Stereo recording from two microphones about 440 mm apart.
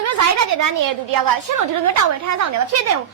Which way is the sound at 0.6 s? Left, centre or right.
Right.